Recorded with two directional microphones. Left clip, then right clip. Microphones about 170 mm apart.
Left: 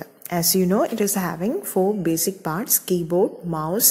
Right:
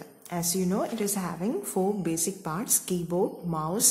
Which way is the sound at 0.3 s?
35° left (ahead or behind).